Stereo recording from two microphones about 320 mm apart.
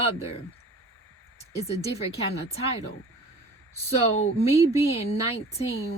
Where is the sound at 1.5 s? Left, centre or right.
Centre.